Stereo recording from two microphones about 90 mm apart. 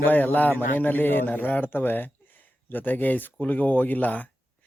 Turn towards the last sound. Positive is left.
turn(degrees=15)  # may be behind; listen again after turning